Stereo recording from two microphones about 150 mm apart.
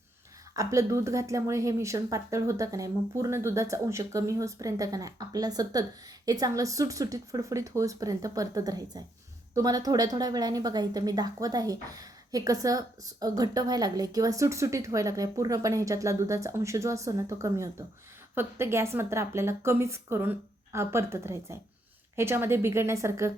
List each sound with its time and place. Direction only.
0.5 s a woman's voice: 20° right (ahead or behind)